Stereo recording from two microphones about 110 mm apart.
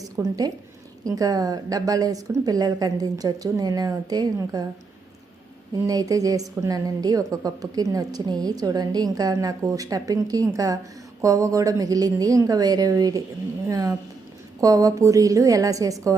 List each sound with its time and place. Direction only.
0.0 s a woman's voice: 35° right (ahead or behind)
5.8 s a woman's voice: 35° right (ahead or behind)